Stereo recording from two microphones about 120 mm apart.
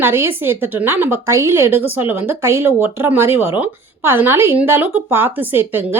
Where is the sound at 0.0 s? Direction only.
20° right (ahead or behind).